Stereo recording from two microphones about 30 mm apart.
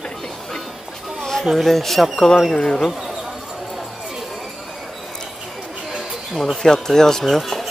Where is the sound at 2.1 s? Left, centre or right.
Left.